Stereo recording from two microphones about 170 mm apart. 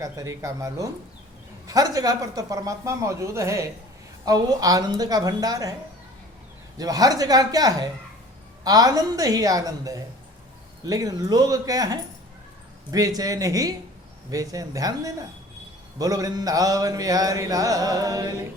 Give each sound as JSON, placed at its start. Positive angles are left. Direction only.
{"t": 0.0, "sound": "mantra", "side_deg": -20}
{"t": 6.7, "sound": "mantra", "side_deg": -20}